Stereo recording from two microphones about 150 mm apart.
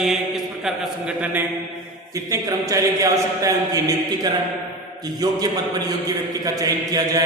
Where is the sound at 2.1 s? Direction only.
20° right (ahead or behind).